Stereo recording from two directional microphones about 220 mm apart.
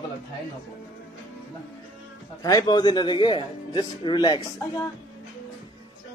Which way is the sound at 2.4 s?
20° left (ahead or behind).